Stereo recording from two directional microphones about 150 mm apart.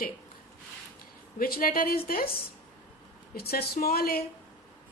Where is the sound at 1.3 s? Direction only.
80° left.